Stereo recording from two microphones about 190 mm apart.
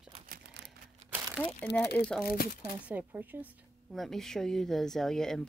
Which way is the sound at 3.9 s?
Centre (ahead or behind).